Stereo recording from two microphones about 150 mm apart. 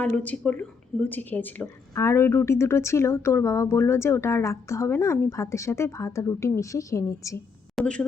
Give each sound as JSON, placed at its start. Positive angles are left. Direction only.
{"t": 0.0, "sound": "a woman's voice", "side_deg": 10}
{"t": 7.8, "sound": "speech", "side_deg": 5}